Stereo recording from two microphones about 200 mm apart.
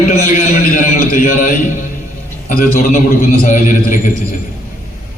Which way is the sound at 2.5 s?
40° left (ahead or behind).